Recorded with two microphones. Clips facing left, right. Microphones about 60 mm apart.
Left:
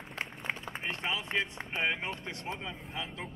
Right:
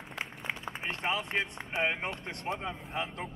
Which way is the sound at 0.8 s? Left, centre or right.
Right.